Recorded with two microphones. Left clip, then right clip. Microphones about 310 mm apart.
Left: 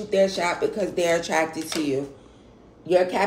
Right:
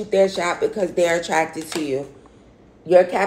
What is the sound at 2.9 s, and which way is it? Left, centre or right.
Speech, centre.